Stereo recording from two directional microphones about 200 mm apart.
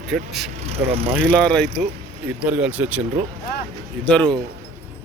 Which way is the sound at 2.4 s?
5° right (ahead or behind).